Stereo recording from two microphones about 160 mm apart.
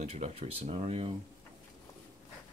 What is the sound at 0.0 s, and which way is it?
Speech, 40° right (ahead or behind).